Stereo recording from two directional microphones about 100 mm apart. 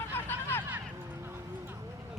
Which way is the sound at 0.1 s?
20° left (ahead or behind).